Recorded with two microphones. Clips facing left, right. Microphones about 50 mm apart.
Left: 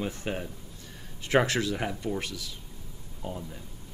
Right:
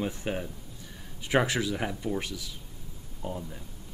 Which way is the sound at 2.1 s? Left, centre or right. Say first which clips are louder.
Right 1 dB; centre.